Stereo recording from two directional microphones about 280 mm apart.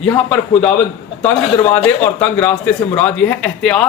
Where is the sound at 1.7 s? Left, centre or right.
Centre.